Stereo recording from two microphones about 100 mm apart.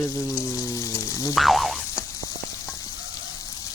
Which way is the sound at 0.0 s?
30° left (ahead or behind).